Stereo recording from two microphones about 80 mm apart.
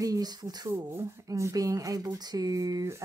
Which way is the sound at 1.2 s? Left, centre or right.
Right.